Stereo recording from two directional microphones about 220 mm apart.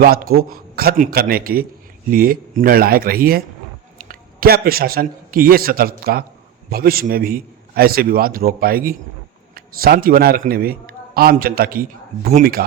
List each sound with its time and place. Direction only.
0.0 s a man's voice: 45° right (ahead or behind)